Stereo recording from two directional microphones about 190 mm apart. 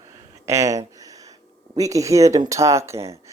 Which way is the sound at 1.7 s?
15° right (ahead or behind).